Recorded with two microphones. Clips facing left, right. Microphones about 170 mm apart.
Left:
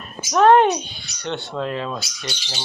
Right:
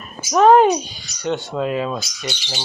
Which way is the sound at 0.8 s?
40° right (ahead or behind).